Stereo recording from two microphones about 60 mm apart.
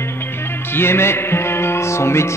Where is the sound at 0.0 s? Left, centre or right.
Left.